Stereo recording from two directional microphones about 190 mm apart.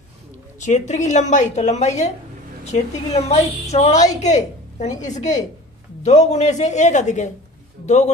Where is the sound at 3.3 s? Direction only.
35° left (ahead or behind).